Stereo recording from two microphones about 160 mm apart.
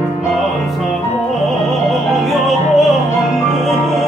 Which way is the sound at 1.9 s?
Centre (ahead or behind).